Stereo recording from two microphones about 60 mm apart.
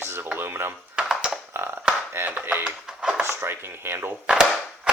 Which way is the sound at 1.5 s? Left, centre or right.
Right.